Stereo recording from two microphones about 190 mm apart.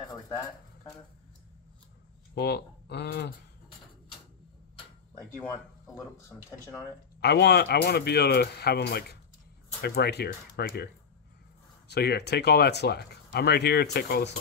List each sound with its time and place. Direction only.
2.3 s speech: 60° left (ahead or behind)
5.9 s speech: 15° left (ahead or behind)
7.2 s speech: 60° left (ahead or behind)
11.9 s speech: 60° left (ahead or behind)